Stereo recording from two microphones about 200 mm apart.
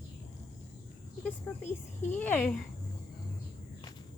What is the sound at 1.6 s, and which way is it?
Speech, 10° left (ahead or behind).